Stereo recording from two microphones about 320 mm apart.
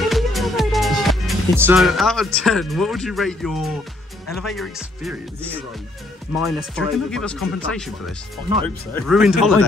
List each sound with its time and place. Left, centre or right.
0.0 s speech: centre